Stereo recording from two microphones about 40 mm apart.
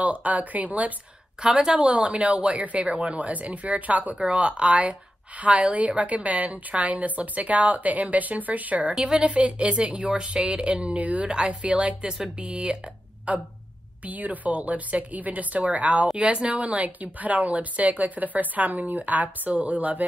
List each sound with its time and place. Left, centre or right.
0.0 s a woman's voice: right
1.4 s speech: centre
1.8 s a woman's voice: right
12.1 s speech: centre
12.4 s a woman's voice: right